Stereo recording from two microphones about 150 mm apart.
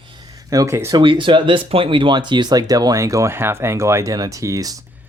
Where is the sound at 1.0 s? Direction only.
35° right (ahead or behind).